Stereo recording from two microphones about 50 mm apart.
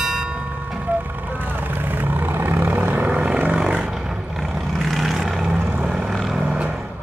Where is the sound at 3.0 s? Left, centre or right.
Right.